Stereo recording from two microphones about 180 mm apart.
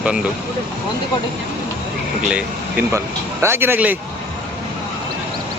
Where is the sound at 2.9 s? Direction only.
15° right (ahead or behind).